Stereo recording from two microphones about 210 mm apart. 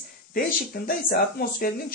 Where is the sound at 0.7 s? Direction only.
50° left (ahead or behind).